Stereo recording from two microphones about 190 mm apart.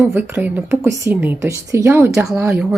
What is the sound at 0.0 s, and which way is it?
Speech, 10° right (ahead or behind).